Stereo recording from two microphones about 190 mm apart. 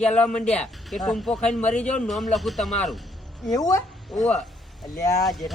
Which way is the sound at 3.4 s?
20° left (ahead or behind).